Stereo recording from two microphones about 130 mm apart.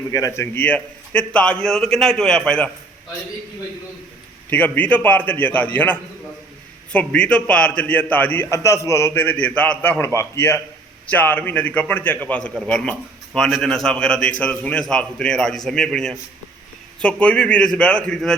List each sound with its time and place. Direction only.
0.1 s a man's voice: 25° left (ahead or behind)
0.5 s a man's voice: 10° left (ahead or behind)
4.4 s a man's voice: 15° left (ahead or behind)